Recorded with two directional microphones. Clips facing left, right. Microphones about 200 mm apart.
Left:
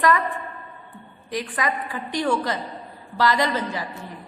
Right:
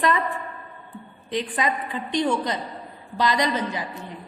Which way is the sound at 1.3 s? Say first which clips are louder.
Right 1 dB; 25° right (ahead or behind).